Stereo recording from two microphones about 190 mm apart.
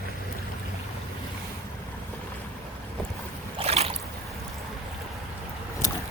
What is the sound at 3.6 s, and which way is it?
Boat, 30° right (ahead or behind).